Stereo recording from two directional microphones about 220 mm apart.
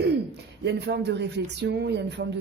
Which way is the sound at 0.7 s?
50° right (ahead or behind).